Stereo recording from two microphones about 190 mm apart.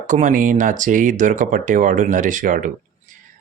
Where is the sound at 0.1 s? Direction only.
40° right (ahead or behind).